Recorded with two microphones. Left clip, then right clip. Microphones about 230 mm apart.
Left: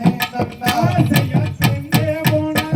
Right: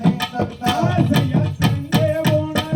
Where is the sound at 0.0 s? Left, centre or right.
Left.